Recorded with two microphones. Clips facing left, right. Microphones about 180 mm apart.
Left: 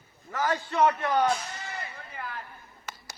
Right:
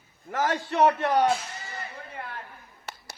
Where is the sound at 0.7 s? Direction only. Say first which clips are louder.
Right 3 dB; 65° right (ahead or behind).